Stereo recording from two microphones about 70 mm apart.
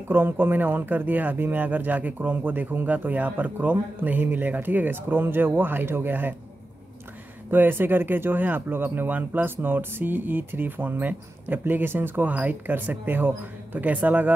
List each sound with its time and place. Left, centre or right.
0.1 s speech: right
7.5 s speech: right